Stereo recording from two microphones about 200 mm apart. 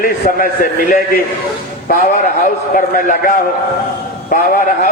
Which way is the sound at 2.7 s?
40° left (ahead or behind).